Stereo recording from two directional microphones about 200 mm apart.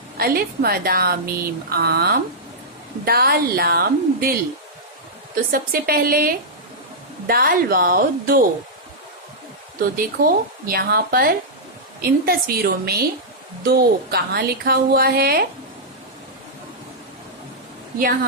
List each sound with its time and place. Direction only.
0.2 s speech: 50° right (ahead or behind)
5.5 s speech: 45° right (ahead or behind)
10.0 s speech: 50° right (ahead or behind)
18.0 s speech: 45° right (ahead or behind)